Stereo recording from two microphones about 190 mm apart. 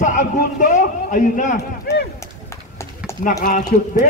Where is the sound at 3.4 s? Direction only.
45° left (ahead or behind).